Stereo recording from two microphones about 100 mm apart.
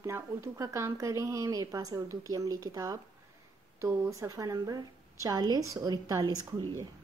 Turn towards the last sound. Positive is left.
turn(degrees=-40)  # may be behind; listen again after turning